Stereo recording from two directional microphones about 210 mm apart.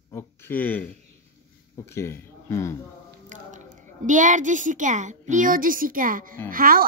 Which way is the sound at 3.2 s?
35° right (ahead or behind).